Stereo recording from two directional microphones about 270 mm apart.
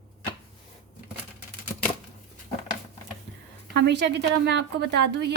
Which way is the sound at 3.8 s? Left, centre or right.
Right.